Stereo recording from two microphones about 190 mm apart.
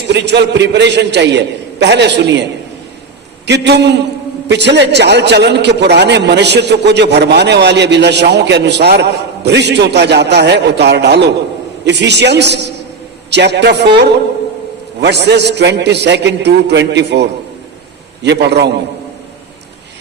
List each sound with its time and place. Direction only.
0.1 s a man's voice: 65° right (ahead or behind)